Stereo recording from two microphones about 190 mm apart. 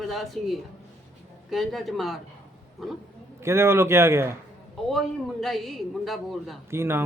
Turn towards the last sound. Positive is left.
turn(degrees=-15)  # may be behind; listen again after turning